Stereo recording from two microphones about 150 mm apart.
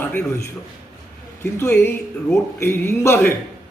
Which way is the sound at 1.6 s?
15° left (ahead or behind).